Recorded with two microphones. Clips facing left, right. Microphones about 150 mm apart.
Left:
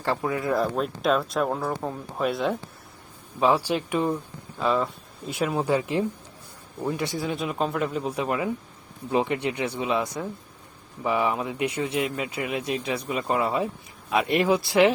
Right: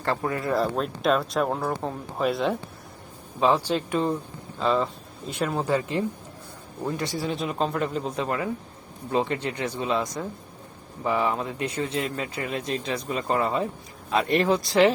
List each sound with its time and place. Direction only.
0.0 s speech: 10° left (ahead or behind)
3.4 s speech: 10° left (ahead or behind)
7.3 s speech: centre (ahead or behind)